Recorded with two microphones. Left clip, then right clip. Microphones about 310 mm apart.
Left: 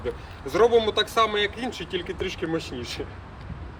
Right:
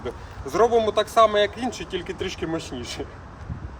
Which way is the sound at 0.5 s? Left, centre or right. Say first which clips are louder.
Even; centre.